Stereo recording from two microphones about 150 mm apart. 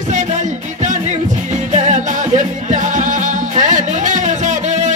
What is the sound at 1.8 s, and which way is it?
Music, 55° right (ahead or behind).